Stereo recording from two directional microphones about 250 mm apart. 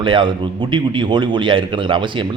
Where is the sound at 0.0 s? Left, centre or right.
Centre.